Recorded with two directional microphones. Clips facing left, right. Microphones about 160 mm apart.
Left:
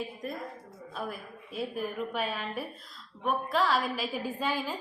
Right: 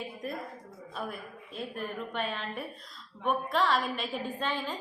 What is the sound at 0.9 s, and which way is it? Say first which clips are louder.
A woman's voice: left 1 dB; centre (ahead or behind).